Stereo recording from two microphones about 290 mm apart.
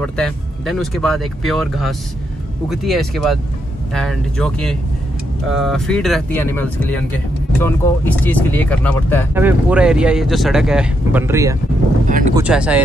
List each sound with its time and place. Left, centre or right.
0.0 s speech: centre
9.3 s speech: centre
12.1 s speech: right
12.4 s speech: centre